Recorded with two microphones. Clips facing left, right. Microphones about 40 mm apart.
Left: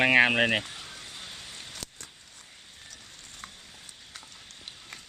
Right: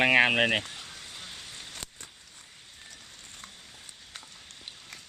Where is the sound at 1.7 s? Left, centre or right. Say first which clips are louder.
Even; right.